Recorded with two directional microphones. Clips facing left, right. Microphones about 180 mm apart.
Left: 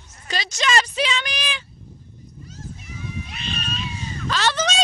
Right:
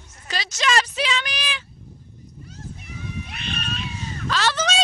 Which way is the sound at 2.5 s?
60° right (ahead or behind).